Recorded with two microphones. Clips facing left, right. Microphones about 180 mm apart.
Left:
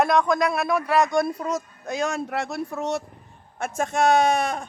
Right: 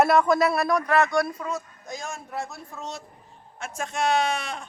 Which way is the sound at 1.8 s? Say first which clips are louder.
Left 10 dB; 75° left (ahead or behind).